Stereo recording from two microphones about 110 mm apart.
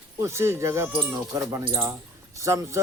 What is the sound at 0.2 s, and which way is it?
Speech, 25° right (ahead or behind).